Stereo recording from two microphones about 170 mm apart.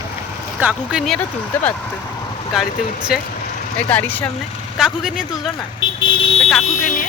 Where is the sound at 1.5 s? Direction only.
10° left (ahead or behind).